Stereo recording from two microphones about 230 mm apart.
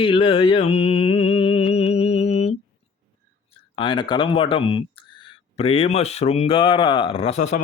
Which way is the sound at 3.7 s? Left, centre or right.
Left.